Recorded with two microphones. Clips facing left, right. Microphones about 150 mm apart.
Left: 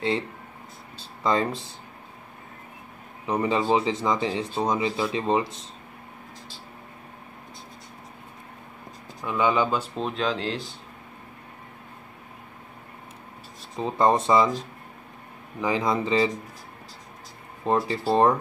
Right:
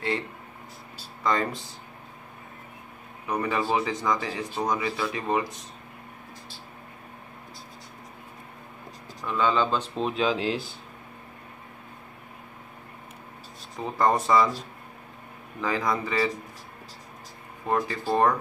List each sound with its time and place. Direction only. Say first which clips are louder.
0.9 s a sound: left 2 dB; 25° left (ahead or behind)
3.3 s speech: left 4 dB; 20° left (ahead or behind)
9.2 s speech: left 1 dB; 15° left (ahead or behind)
9.9 s speech: right 1 dB; centre (ahead or behind)
13.7 s speech: left 2 dB; 20° left (ahead or behind)
15.6 s speech: left 3 dB; 20° left (ahead or behind)
17.6 s speech: left 3 dB; 30° left (ahead or behind)